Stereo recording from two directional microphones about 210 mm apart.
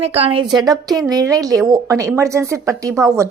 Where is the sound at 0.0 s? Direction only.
30° right (ahead or behind).